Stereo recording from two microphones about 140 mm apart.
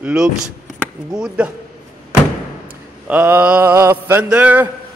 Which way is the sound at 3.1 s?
10° right (ahead or behind).